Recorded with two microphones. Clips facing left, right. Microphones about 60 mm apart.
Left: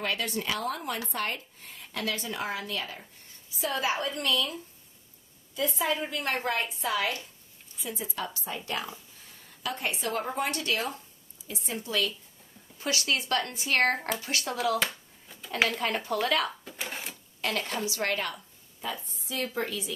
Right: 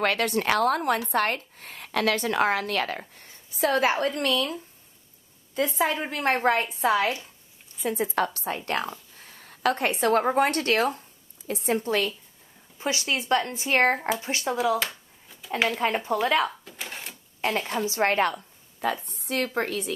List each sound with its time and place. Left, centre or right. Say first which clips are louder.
0.0 s a woman's voice: right 7 dB; right
7.8 s a woman's voice: right 10 dB; right
12.7 s speech: right 2 dB; right
13.9 s speech: right 5 dB; centre
14.2 s speech: right 4 dB; right
15.8 s speech: right 4 dB; right
16.6 s cash register: left 1 dB; centre
17.6 s speech: right 3 dB; centre
17.8 s a woman's voice: right 7 dB; right
19.0 s a woman's voice: right 6 dB; right